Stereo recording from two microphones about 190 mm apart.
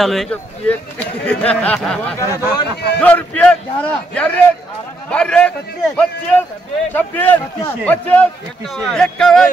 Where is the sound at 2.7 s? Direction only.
60° left (ahead or behind).